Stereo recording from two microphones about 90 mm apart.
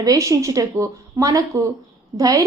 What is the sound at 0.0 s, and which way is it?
A woman's voice, 40° right (ahead or behind).